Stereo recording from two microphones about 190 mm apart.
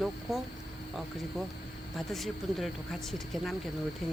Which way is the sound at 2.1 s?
Centre (ahead or behind).